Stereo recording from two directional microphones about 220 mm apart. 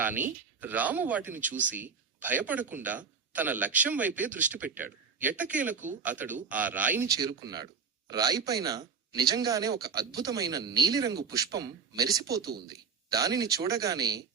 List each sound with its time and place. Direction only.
0.0 s speech: 10° right (ahead or behind)